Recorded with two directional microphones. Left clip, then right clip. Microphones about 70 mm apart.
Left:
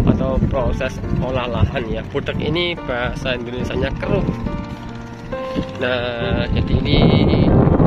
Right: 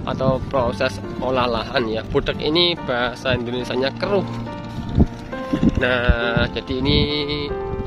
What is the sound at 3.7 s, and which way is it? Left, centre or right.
Speech, right.